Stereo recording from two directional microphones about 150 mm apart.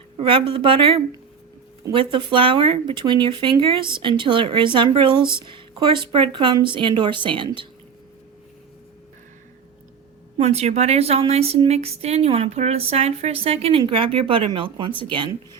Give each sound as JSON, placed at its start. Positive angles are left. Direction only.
{"t": 0.2, "sound": "speech", "side_deg": -35}
{"t": 10.3, "sound": "speech", "side_deg": -45}